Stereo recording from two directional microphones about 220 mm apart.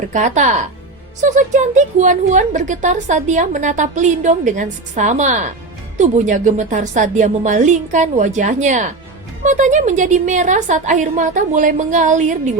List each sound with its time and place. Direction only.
0.1 s a woman's voice: 35° right (ahead or behind)